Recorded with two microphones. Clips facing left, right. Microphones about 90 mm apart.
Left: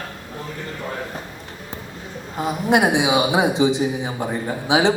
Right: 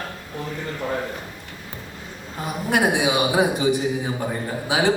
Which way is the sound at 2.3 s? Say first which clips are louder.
Left 4 dB; 20° left (ahead or behind).